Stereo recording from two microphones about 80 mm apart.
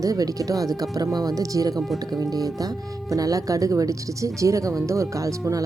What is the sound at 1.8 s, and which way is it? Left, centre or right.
Speech, centre.